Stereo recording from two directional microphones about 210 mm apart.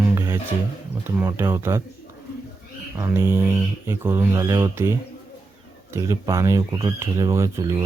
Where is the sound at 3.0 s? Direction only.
10° right (ahead or behind).